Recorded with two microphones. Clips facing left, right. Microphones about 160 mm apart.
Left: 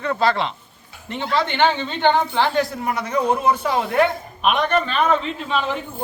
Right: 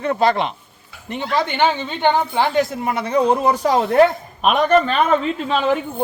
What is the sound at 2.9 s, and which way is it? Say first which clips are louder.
A man's voice: right 4 dB; 30° right (ahead or behind).